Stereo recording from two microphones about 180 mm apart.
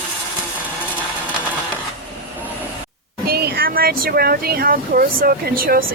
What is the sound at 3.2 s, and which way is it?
Speech, 60° right (ahead or behind).